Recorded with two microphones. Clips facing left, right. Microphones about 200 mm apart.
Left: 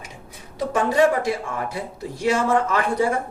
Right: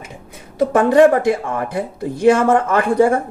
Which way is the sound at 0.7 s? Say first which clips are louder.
Right 7 dB; 55° right (ahead or behind).